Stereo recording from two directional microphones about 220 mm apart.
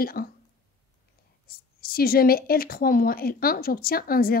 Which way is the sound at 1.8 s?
45° left (ahead or behind).